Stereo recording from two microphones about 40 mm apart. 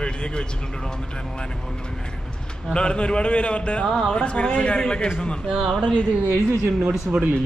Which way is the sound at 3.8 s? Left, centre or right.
Centre.